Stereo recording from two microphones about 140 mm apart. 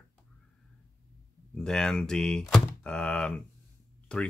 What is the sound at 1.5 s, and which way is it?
Speech, 5° left (ahead or behind).